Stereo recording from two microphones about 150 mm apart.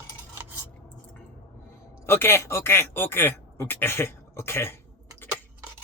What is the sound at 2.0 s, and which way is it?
Speech, 15° left (ahead or behind).